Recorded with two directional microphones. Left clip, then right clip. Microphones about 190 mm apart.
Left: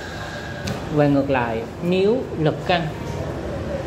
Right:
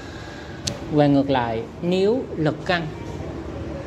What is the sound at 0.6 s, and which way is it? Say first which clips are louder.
Speech: right 1 dB; 30° right (ahead or behind).